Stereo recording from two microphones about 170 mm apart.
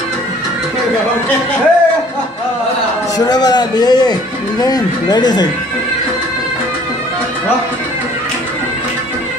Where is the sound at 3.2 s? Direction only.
25° left (ahead or behind).